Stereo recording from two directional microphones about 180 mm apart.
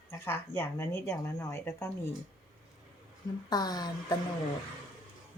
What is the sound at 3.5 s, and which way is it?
Speech, 20° left (ahead or behind).